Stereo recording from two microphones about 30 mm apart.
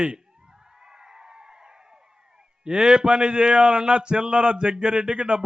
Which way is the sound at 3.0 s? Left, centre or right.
Right.